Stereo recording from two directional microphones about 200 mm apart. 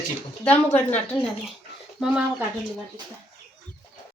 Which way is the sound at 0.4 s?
10° left (ahead or behind).